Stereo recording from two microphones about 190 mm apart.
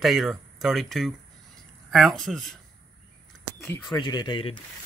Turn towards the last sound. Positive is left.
turn(degrees=25)  # may be behind; listen again after turning